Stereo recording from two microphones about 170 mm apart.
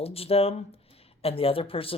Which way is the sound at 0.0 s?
35° left (ahead or behind).